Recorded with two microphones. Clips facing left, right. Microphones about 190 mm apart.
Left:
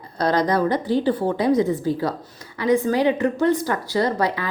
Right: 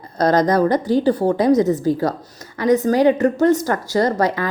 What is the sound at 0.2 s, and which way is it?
A woman's voice, 45° right (ahead or behind).